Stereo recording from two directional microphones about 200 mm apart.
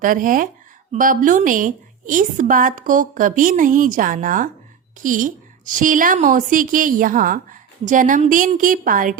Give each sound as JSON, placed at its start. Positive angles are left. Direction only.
{"t": 0.0, "sound": "a woman's voice", "side_deg": -45}